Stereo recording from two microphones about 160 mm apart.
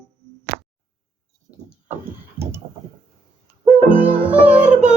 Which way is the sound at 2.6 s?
25° right (ahead or behind).